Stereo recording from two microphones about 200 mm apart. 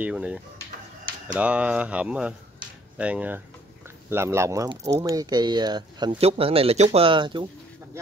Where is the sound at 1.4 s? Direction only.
5° right (ahead or behind); by 7.4 s 25° right (ahead or behind).